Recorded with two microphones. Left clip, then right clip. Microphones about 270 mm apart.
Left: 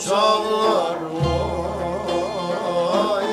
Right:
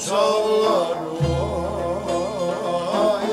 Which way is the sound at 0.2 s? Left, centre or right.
Centre.